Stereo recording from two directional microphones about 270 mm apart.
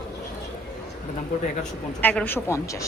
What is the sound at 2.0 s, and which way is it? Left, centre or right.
Speech, centre.